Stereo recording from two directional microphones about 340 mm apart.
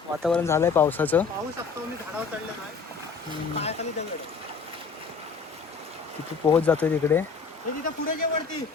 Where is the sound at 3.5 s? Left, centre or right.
Centre.